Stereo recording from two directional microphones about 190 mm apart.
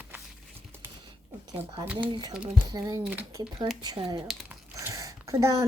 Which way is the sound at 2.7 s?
20° right (ahead or behind).